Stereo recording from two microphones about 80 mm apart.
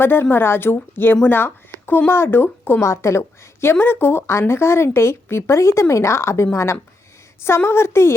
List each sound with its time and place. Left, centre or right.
0.0 s a woman's voice: left
2.8 s a woman's voice: left